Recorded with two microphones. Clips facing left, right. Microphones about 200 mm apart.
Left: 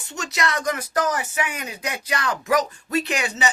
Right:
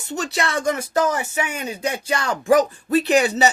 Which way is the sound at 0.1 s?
35° right (ahead or behind).